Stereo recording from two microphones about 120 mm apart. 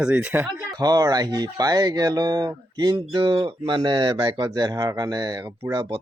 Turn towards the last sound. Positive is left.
turn(degrees=-40)  # may be behind; listen again after turning